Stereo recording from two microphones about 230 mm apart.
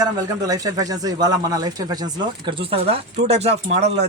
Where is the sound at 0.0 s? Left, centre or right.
Centre.